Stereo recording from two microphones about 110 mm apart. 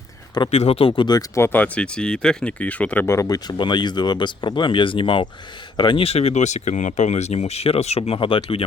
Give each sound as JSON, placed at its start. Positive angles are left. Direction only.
{"t": 0.5, "sound": "speech", "side_deg": 70}
{"t": 1.4, "sound": "speech", "side_deg": 15}
{"t": 3.1, "sound": "speech", "side_deg": 30}
{"t": 6.1, "sound": "speech", "side_deg": 70}